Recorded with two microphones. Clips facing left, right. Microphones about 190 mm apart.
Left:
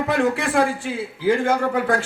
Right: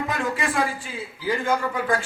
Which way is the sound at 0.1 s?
65° left (ahead or behind).